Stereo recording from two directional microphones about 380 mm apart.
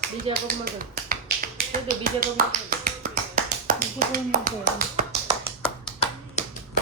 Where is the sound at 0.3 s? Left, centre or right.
Right.